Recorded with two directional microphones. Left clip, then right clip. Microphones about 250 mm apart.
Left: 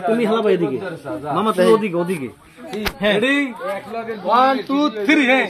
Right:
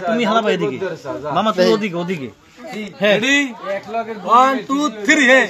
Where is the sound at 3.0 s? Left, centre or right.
Right.